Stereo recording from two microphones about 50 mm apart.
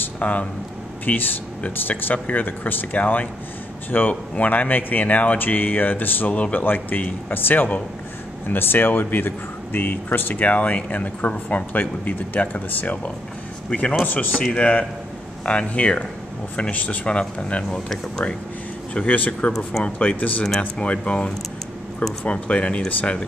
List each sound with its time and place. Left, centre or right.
0.2 s speech: left
6.3 s speech: left
13.7 s speech: left
14.0 s speech: left
14.5 s speech: left
18.9 s speech: left